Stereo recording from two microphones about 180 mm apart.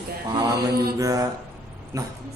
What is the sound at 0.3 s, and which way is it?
Mantra, 25° right (ahead or behind).